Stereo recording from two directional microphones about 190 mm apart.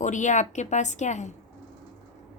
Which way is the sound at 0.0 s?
40° left (ahead or behind).